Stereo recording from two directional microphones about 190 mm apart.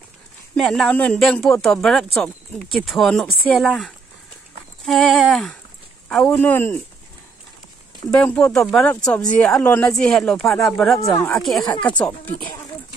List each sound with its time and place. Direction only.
0.6 s speech: centre (ahead or behind)
8.2 s speech: 10° left (ahead or behind)